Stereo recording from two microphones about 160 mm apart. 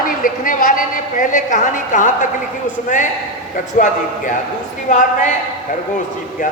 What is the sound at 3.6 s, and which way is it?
Speech, 55° left (ahead or behind).